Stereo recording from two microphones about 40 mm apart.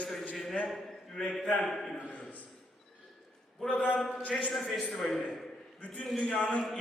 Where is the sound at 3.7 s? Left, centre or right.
Left.